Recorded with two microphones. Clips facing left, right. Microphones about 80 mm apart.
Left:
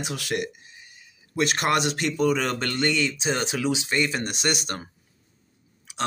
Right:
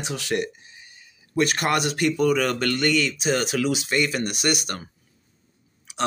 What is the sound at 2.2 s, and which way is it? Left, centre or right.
Speech, left.